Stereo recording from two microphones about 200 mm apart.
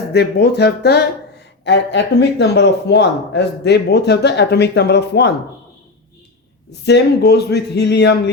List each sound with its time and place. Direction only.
0.1 s speech: 55° left (ahead or behind)
6.7 s speech: 55° left (ahead or behind)